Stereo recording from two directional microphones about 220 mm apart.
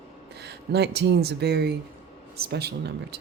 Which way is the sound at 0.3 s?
50° right (ahead or behind).